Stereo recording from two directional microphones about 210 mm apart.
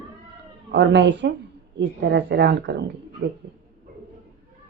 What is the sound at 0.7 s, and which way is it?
A woman's voice, 55° right (ahead or behind).